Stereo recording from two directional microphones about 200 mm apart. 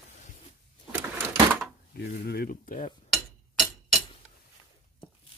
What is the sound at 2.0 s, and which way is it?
Speech, 50° left (ahead or behind).